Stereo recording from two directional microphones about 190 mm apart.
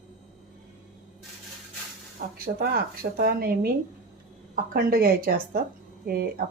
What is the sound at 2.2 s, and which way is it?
Speech, 50° right (ahead or behind).